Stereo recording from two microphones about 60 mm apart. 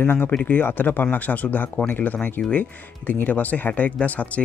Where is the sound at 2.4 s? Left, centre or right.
Centre.